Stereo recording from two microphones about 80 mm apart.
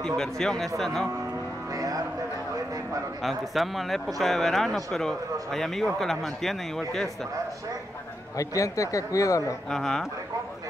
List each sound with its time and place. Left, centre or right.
0.0 s speech: centre
1.7 s music: right
3.2 s speech: centre
8.4 s speech: left
9.7 s speech: centre